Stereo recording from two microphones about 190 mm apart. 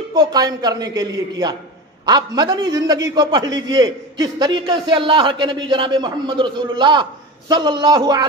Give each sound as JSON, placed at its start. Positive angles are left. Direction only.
{"t": 0.2, "sound": "a man's voice", "side_deg": -20}